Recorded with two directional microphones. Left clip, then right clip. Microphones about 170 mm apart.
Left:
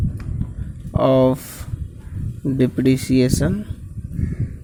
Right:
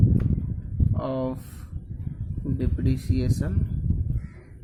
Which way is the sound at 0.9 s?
35° left (ahead or behind).